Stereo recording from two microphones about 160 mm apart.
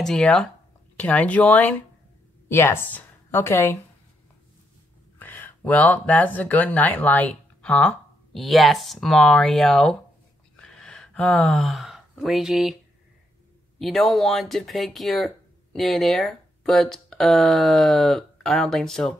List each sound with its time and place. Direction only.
0.0 s a woman's voice: 5° left (ahead or behind)
5.2 s speech: 10° left (ahead or behind)
10.5 s a sound: 5° left (ahead or behind)
13.7 s speech: centre (ahead or behind)